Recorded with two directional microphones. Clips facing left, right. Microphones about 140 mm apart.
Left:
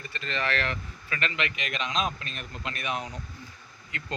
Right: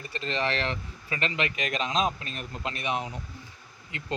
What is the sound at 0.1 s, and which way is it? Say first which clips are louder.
Speech: right 2 dB; 30° right (ahead or behind).